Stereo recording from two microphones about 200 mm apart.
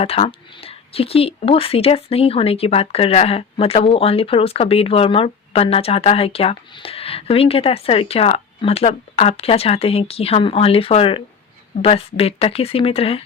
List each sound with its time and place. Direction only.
0.0 s speech: 30° left (ahead or behind)